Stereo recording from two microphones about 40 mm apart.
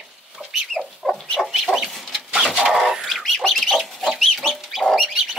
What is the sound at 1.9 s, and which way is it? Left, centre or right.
Chicken, centre.